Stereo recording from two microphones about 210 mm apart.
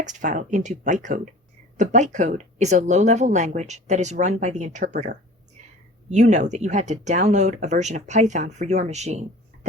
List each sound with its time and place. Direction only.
0.0 s speech: 35° right (ahead or behind)